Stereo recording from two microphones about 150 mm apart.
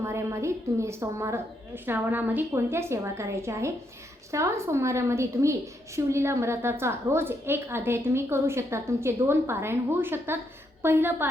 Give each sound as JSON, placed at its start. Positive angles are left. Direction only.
{"t": 0.0, "sound": "a woman's voice", "side_deg": -20}